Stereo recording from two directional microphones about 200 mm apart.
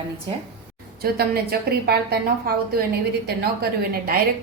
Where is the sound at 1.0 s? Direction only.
50° right (ahead or behind).